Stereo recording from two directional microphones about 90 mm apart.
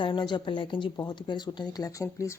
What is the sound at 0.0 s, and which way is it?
Speech, 60° left (ahead or behind).